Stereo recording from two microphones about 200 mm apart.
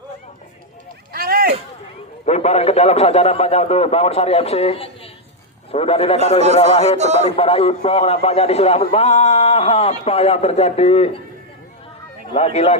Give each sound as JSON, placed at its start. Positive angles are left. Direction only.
{"t": 1.1, "sound": "a sound", "side_deg": -50}
{"t": 2.2, "sound": "a man's voice", "side_deg": 35}
{"t": 7.0, "sound": "speech", "side_deg": -35}
{"t": 7.3, "sound": "a man's voice", "side_deg": 30}
{"t": 12.3, "sound": "a man's voice", "side_deg": 30}